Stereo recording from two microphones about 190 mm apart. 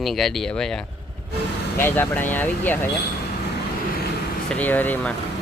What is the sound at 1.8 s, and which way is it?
Speech, 10° left (ahead or behind).